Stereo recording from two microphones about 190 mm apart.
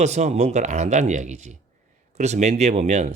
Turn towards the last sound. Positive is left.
turn(degrees=-40)  # may be behind; listen again after turning